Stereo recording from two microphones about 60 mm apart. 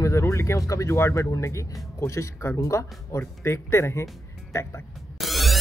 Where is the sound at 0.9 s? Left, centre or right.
Left.